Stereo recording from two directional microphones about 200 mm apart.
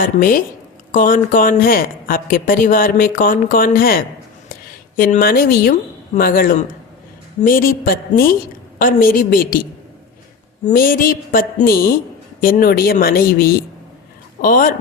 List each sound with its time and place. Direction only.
0.0 s speech: 45° left (ahead or behind)
10.7 s speech: 45° left (ahead or behind)